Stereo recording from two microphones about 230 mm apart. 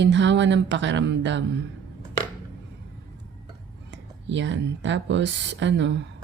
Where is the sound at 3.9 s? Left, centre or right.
Right.